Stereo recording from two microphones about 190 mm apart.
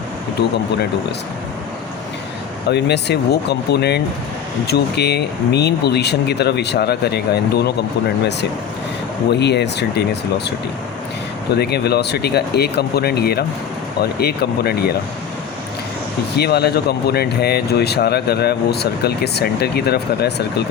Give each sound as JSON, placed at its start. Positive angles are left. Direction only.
{"t": 2.6, "sound": "speech", "side_deg": 60}
{"t": 11.5, "sound": "speech", "side_deg": 60}
{"t": 16.3, "sound": "speech", "side_deg": 60}